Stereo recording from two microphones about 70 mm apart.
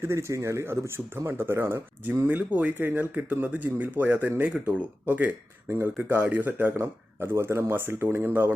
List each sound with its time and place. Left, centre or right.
0.0 s speech: right
5.6 s speech: right
6.7 s speech: right